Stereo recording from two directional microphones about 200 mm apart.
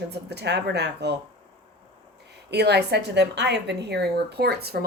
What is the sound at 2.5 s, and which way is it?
A woman's voice, 55° right (ahead or behind).